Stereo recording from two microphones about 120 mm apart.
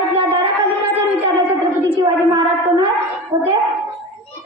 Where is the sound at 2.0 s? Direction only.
40° right (ahead or behind).